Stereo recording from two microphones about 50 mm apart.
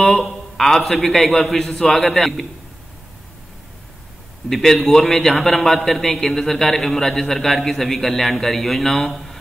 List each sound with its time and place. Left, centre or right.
0.2 s a man's voice: centre
4.5 s a man's voice: centre